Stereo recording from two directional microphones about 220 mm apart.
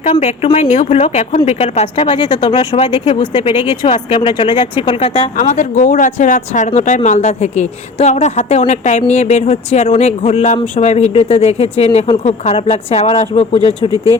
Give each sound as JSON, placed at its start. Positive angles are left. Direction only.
{"t": 0.0, "sound": "speech", "side_deg": 30}
{"t": 13.9, "sound": "speech", "side_deg": -15}